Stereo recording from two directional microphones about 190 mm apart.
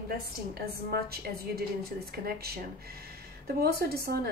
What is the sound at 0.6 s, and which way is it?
A woman's voice, 55° right (ahead or behind).